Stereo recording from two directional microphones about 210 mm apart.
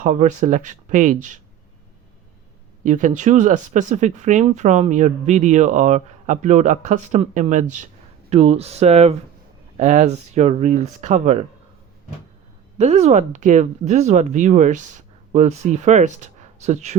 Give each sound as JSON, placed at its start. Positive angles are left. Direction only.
{"t": 0.0, "sound": "speech", "side_deg": -35}
{"t": 2.8, "sound": "speech", "side_deg": -35}
{"t": 12.8, "sound": "speech", "side_deg": -30}